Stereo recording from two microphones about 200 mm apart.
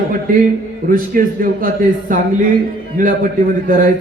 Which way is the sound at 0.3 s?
40° right (ahead or behind).